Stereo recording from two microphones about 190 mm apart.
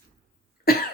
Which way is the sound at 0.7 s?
55° left (ahead or behind).